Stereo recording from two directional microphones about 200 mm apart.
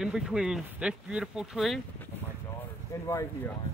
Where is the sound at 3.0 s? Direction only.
15° left (ahead or behind).